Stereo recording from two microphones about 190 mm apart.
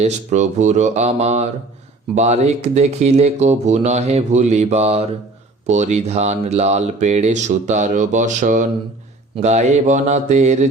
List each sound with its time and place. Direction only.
0.0 s speech: 35° right (ahead or behind)